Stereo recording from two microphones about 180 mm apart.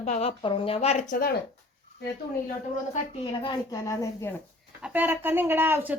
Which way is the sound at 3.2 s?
25° left (ahead or behind).